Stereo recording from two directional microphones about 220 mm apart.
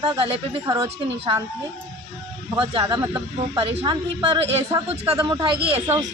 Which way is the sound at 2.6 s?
20° right (ahead or behind).